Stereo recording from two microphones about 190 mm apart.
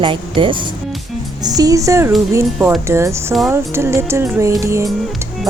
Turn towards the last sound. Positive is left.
turn(degrees=-15)  # may be behind; listen again after turning